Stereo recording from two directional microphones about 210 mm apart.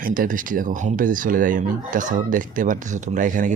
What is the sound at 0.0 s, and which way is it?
Speech, 40° right (ahead or behind).